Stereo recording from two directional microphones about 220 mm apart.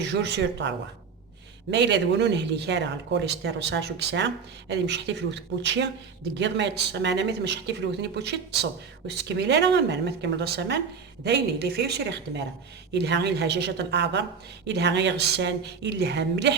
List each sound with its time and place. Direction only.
0.0 s speech: 50° right (ahead or behind)
1.7 s speech: 50° right (ahead or behind)